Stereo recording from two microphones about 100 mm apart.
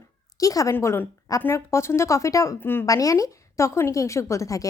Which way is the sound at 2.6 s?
20° left (ahead or behind).